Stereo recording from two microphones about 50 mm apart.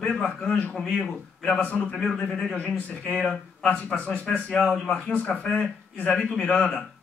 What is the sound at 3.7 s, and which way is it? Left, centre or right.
Speech, left.